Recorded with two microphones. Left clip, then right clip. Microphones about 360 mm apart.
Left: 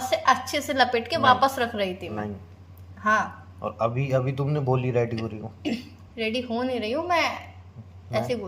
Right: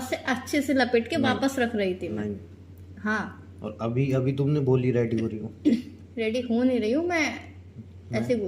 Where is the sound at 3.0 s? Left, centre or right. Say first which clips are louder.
Left 7 dB; left.